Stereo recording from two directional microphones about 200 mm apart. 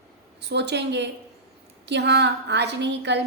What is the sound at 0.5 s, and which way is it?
A woman's voice, 60° right (ahead or behind).